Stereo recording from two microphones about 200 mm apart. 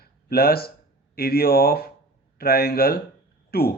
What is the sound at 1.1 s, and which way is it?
Speech, 50° left (ahead or behind).